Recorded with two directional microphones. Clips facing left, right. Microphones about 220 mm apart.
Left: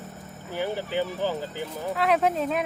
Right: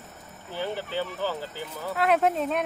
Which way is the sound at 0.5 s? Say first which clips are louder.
Left 3 dB; 15° left (ahead or behind).